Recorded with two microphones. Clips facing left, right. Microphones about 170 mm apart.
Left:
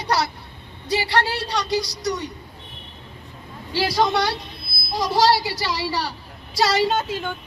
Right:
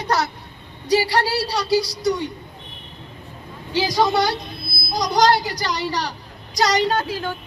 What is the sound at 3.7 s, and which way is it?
Speech, 15° right (ahead or behind).